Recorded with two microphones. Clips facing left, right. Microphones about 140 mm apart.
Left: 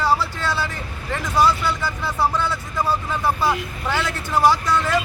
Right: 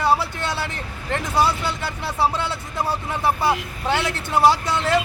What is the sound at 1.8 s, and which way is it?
Speech, 65° right (ahead or behind).